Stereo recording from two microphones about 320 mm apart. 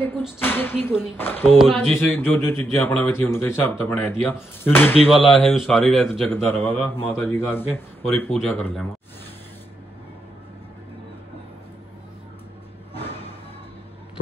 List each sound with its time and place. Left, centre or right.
0.0 s speech: centre
12.9 s music: centre